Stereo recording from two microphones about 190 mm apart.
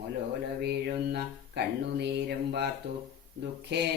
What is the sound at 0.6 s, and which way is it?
Speech, 60° right (ahead or behind).